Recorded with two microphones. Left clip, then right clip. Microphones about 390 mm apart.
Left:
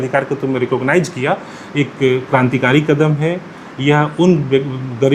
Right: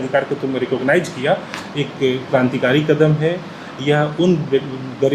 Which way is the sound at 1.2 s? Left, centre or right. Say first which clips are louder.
Even; left.